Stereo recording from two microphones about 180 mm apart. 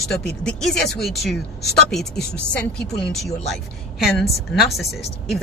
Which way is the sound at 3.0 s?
Centre (ahead or behind).